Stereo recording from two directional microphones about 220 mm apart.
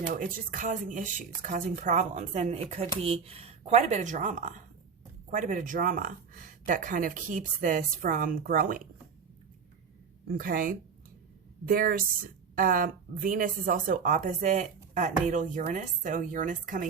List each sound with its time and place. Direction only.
0.1 s speech: 40° right (ahead or behind)
10.2 s speech: 40° right (ahead or behind)